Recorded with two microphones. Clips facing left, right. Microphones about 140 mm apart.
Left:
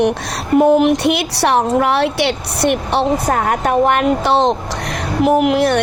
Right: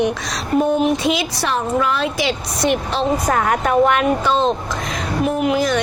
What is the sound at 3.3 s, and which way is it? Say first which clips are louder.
Speech: left 1 dB; 40° left (ahead or behind).